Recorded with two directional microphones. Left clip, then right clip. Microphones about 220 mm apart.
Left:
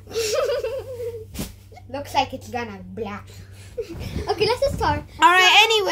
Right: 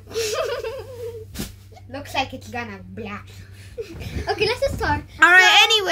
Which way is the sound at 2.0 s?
15° left (ahead or behind).